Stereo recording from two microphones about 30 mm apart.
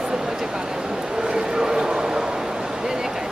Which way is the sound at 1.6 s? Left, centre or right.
Centre.